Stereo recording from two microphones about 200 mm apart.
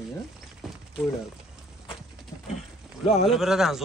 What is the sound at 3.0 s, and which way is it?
Speech, 30° left (ahead or behind).